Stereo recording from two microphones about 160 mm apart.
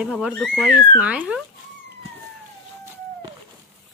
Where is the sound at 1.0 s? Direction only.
10° right (ahead or behind).